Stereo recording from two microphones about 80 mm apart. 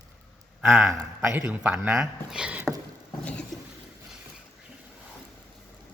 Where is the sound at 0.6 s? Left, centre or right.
Centre.